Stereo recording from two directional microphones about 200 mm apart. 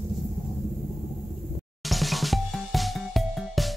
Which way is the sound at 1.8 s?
Centre (ahead or behind).